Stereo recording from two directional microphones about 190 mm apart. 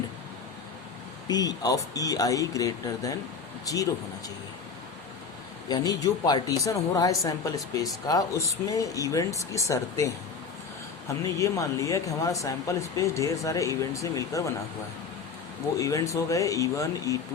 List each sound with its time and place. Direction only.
1.3 s speech: 20° left (ahead or behind)
5.6 s speech: 20° left (ahead or behind)
11.3 s speech: 15° left (ahead or behind)
15.8 s speech: 15° left (ahead or behind)